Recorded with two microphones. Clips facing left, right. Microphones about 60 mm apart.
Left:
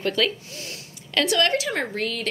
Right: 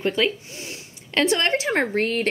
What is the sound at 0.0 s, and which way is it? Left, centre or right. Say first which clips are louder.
Speech: right 1 dB; right.